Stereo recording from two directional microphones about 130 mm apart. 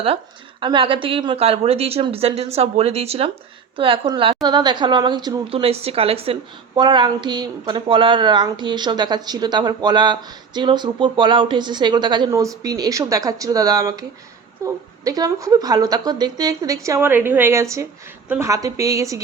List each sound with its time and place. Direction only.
0.6 s a woman's voice: 40° right (ahead or behind)
6.7 s speech: 35° right (ahead or behind)
12.3 s a woman's voice: 25° right (ahead or behind)